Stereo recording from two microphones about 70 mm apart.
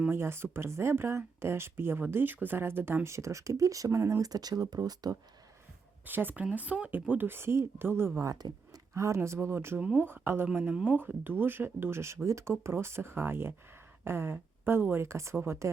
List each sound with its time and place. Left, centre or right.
0.1 s speech: right
4.3 s speech: right
6.1 s speech: right
7.1 s speech: right
8.2 s speech: right
9.0 s speech: right
9.7 s speech: right